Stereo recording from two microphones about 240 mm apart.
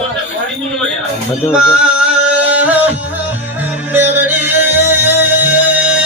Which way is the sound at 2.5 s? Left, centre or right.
Centre.